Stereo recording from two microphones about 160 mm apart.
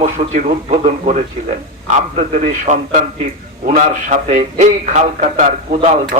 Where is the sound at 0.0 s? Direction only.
45° right (ahead or behind).